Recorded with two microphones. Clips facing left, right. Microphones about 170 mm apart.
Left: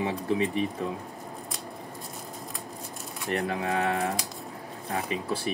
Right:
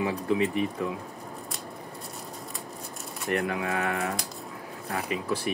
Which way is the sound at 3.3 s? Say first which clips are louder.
Even; 30° left (ahead or behind).